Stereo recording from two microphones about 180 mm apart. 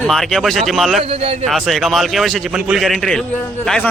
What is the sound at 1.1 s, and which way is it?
Speech, 35° right (ahead or behind).